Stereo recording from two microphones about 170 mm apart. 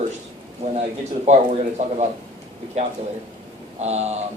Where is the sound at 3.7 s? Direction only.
40° right (ahead or behind).